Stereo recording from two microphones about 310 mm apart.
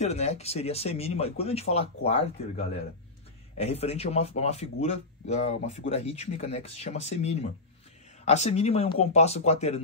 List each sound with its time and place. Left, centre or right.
0.0 s speech: left